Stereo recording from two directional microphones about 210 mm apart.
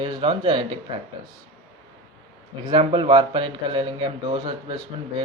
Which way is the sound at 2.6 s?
25° right (ahead or behind).